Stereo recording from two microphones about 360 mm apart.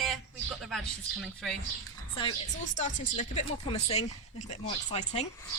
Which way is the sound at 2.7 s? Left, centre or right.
Left.